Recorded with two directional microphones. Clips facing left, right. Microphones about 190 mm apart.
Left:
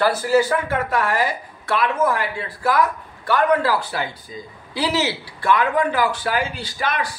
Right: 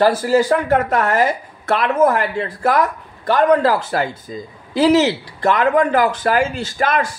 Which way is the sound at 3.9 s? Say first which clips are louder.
Right 6 dB; 45° right (ahead or behind).